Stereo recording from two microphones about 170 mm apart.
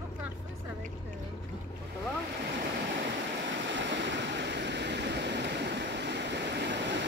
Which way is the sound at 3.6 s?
90° right.